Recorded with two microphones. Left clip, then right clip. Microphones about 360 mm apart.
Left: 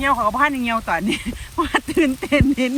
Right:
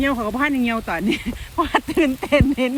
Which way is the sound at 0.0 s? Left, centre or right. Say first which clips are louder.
Left 4 dB; centre.